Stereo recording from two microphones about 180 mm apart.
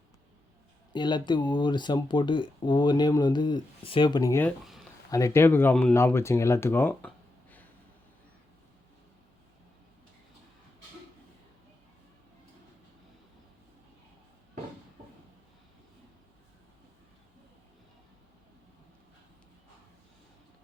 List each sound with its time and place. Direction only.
0.9 s speech: 25° left (ahead or behind)